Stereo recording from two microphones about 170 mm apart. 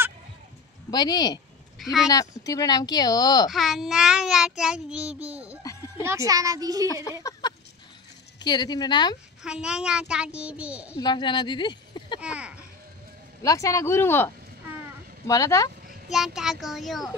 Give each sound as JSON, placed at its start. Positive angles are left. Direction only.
{"t": 0.8, "sound": "speech", "side_deg": 25}
{"t": 3.4, "sound": "child singing", "side_deg": 0}
{"t": 5.6, "sound": "a sound", "side_deg": 20}
{"t": 6.0, "sound": "a child's voice", "side_deg": -20}
{"t": 7.2, "sound": "a sound", "side_deg": 20}
{"t": 8.4, "sound": "speech", "side_deg": 25}
{"t": 9.4, "sound": "child singing", "side_deg": -5}
{"t": 11.0, "sound": "speech", "side_deg": 25}
{"t": 12.2, "sound": "a child's voice", "side_deg": -5}
{"t": 13.4, "sound": "speech", "side_deg": 20}
{"t": 16.1, "sound": "child singing", "side_deg": 0}